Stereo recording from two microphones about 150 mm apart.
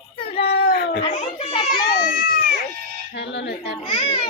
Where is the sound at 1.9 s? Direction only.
75° left (ahead or behind).